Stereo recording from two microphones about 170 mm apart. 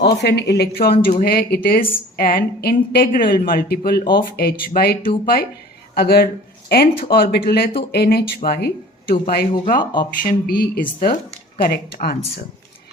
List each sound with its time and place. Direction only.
0.0 s a woman's voice: 80° left; by 12.1 s 60° left (ahead or behind)